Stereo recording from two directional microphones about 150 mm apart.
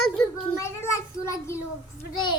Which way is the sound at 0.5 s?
20° left (ahead or behind).